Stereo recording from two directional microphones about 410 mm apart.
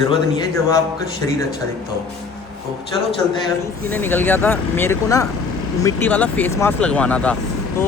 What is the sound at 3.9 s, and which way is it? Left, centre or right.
Speech, centre.